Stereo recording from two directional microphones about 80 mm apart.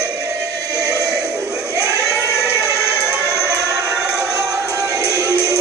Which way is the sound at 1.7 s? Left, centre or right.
Left.